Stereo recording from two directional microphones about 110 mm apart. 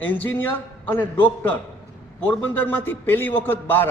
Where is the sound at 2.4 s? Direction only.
15° left (ahead or behind).